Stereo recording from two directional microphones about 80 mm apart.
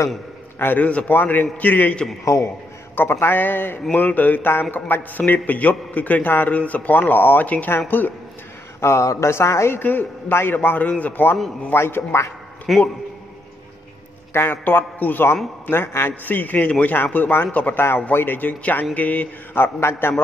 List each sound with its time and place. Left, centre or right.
0.6 s a man's voice: left
2.2 s a man's voice: left
3.0 s a man's voice: left
8.8 s a man's voice: left
12.7 s a man's voice: centre
14.3 s a man's voice: left